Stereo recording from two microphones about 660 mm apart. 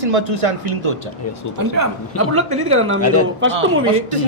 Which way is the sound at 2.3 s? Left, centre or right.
Centre.